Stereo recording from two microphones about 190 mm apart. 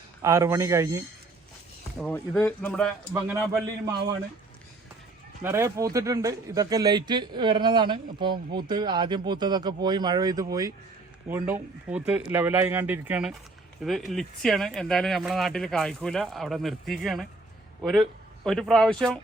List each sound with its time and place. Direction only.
0.2 s speech: 15° right (ahead or behind)
2.0 s speech: 5° left (ahead or behind)
3.1 s speech: 15° right (ahead or behind)
5.4 s a man's voice: 10° right (ahead or behind); by 19.2 s 5° left (ahead or behind)